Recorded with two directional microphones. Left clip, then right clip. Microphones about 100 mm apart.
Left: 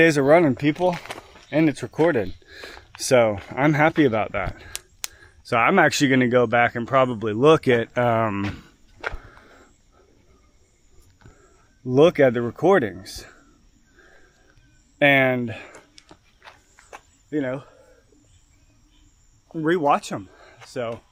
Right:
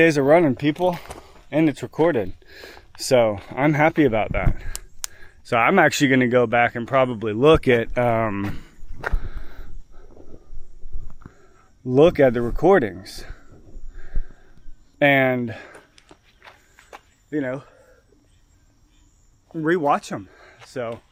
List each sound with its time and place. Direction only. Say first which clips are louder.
0.0 s speech: even; 15° right (ahead or behind)
0.8 s speech: right 1 dB; 45° right (ahead or behind)
1.0 s speech: left 3 dB; 25° right (ahead or behind); by 8.4 s 5° right (ahead or behind)
9.1 s a sound: right 2 dB; 20° right (ahead or behind)
11.9 s speech: right 1 dB; 10° right (ahead or behind)
14.0 s livestock: right 3 dB; 15° right (ahead or behind)
14.9 s speech: even; 10° right (ahead or behind)
16.0 s a sound: even; 35° right (ahead or behind)
17.2 s speech: even; 15° right (ahead or behind)
19.5 s speech: even; 15° right (ahead or behind)